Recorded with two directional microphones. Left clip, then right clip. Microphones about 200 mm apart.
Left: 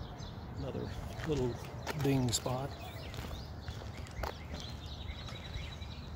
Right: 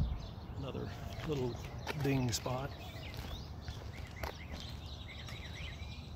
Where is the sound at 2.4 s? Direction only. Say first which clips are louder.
Left 2 dB; 5° left (ahead or behind).